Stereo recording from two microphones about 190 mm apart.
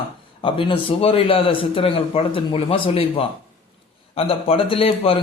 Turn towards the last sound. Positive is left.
turn(degrees=30)  # may be behind; listen again after turning